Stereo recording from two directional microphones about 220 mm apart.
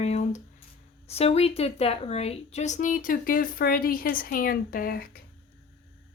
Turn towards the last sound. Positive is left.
turn(degrees=40)  # may be behind; listen again after turning